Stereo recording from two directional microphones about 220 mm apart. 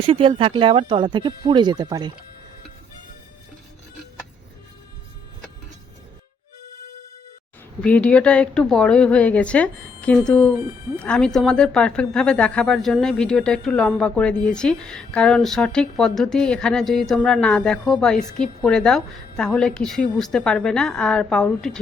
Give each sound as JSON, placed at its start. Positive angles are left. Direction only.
{"t": 0.0, "sound": "speech", "side_deg": -25}
{"t": 7.8, "sound": "speech", "side_deg": 5}